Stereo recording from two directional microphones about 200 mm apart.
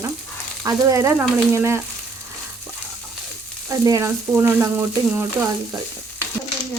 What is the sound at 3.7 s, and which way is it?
Speech, 15° right (ahead or behind).